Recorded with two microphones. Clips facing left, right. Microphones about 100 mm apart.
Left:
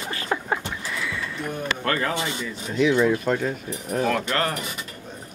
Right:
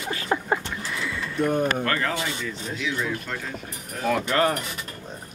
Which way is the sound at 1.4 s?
45° right (ahead or behind).